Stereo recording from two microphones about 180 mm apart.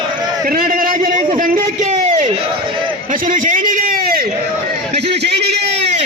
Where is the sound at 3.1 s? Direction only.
50° right (ahead or behind).